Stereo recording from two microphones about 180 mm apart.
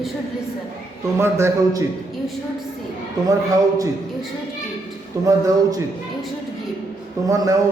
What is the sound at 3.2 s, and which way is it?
Speech, 20° right (ahead or behind).